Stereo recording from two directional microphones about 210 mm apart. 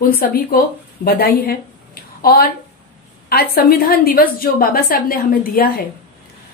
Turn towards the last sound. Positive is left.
turn(degrees=45)  # may be behind; listen again after turning